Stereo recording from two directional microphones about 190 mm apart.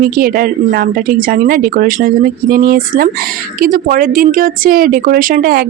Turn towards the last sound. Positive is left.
turn(degrees=-50)  # may be behind; listen again after turning